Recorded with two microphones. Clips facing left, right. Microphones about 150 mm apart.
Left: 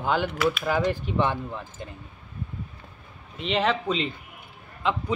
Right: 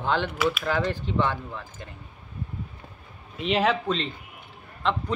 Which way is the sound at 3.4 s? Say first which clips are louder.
Right 1 dB; 5° right (ahead or behind).